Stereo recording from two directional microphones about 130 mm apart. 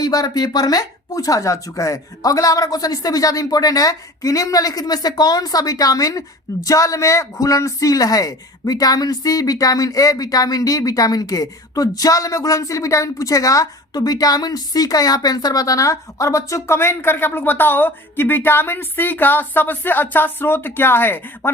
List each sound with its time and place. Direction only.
0.0 s speech: 30° left (ahead or behind)